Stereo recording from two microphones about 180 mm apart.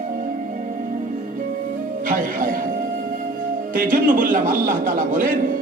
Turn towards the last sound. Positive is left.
turn(degrees=-50)  # may be behind; listen again after turning